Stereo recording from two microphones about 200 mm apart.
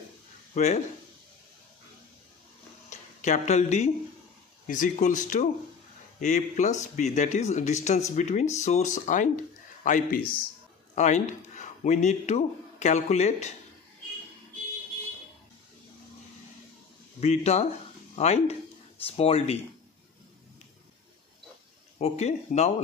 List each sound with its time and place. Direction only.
0.5 s speech: 40° left (ahead or behind)
2.9 s speech: 35° left (ahead or behind)
17.2 s speech: 30° left (ahead or behind)
21.9 s speech: 35° left (ahead or behind)